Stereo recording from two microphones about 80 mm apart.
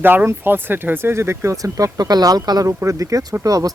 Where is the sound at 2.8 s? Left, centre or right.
Right.